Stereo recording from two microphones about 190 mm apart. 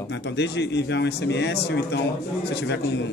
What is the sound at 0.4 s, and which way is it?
A man's voice, 65° left (ahead or behind).